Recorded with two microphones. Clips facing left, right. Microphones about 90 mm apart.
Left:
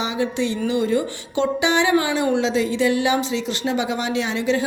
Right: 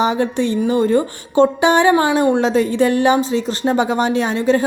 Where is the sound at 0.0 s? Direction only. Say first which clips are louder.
Right 6 dB; 50° right (ahead or behind).